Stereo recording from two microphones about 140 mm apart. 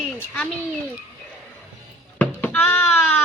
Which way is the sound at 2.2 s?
10° left (ahead or behind).